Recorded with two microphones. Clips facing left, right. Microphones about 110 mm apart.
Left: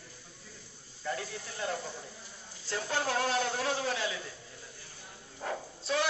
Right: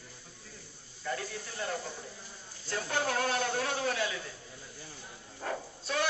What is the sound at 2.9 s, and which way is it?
Speech, 20° left (ahead or behind).